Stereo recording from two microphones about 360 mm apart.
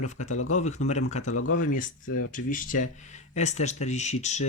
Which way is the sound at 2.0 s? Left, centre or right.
Left.